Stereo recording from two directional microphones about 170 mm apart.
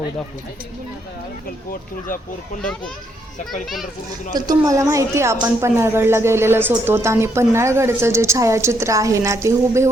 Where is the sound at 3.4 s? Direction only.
55° left (ahead or behind).